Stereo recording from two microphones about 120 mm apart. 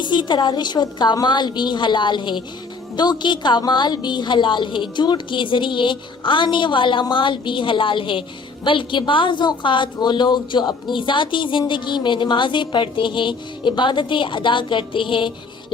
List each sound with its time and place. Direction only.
0.0 s a woman's voice: 40° left (ahead or behind)